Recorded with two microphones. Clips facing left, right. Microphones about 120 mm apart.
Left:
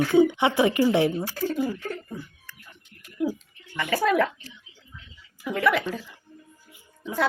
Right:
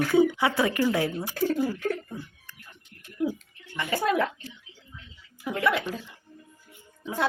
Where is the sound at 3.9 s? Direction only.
25° right (ahead or behind).